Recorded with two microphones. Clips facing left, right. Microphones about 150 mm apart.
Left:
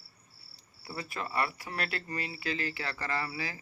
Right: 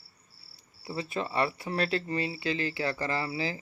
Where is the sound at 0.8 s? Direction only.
25° right (ahead or behind).